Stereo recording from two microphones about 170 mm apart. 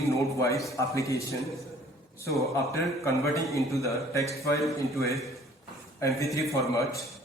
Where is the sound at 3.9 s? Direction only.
20° left (ahead or behind).